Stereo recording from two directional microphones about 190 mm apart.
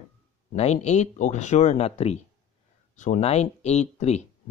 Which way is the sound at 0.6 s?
35° left (ahead or behind).